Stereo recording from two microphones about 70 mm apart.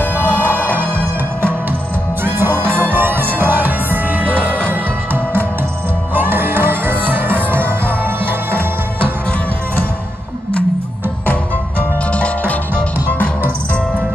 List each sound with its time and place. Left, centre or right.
0.6 s music: right
2.2 s music: right
12.1 s music: centre